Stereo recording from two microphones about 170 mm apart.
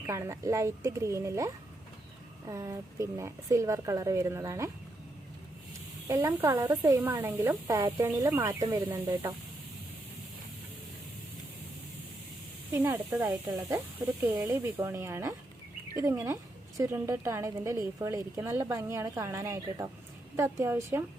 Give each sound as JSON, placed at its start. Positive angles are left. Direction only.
{"t": 0.1, "sound": "a woman's voice", "side_deg": -15}
{"t": 6.1, "sound": "a woman's voice", "side_deg": -20}
{"t": 12.7, "sound": "a woman's voice", "side_deg": -15}